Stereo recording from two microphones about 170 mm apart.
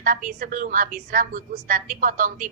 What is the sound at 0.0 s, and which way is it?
A woman's voice, 55° right (ahead or behind).